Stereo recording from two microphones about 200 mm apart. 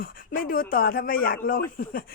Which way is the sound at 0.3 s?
45° left (ahead or behind).